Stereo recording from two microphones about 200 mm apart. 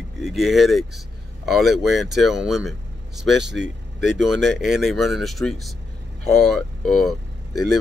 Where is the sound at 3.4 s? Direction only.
60° right (ahead or behind).